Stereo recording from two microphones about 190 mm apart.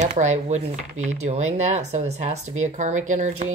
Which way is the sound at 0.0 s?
40° right (ahead or behind).